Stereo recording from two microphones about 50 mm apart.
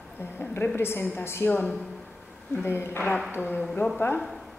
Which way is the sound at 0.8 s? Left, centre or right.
Left.